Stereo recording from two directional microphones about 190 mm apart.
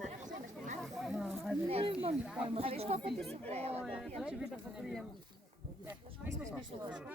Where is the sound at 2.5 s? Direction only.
30° right (ahead or behind).